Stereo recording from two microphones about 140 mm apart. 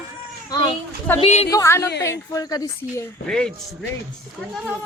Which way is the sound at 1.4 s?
20° left (ahead or behind).